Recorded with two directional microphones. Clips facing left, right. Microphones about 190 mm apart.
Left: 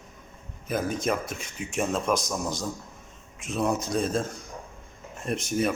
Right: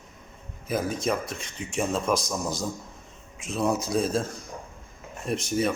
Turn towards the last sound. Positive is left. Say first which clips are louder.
# right 1 dB
turn(degrees=0)  # may be behind; listen again after turning